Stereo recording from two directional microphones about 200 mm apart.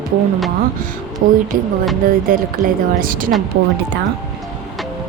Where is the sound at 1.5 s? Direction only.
45° right (ahead or behind).